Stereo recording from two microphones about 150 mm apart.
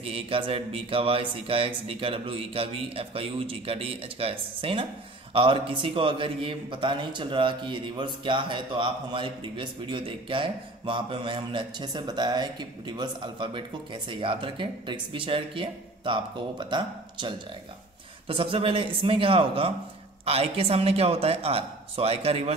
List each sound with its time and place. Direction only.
0.0 s a man's voice: 40° right (ahead or behind)